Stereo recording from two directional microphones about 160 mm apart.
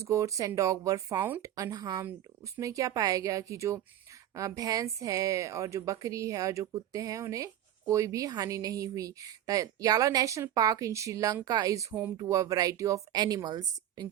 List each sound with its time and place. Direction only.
0.0 s a woman's voice: 20° right (ahead or behind)